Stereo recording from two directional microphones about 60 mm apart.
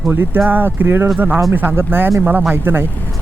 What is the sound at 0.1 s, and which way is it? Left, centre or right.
Speech, right.